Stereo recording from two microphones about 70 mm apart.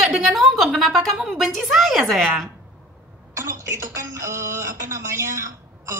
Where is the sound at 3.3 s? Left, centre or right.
Right.